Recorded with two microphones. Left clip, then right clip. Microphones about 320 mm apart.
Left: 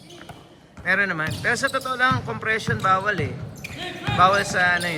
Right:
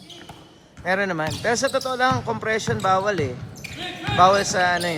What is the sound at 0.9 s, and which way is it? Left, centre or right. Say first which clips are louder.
Speech: left 1 dB; centre.